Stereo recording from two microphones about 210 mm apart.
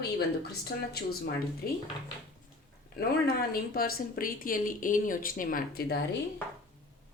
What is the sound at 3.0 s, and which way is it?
Speech, 45° left (ahead or behind).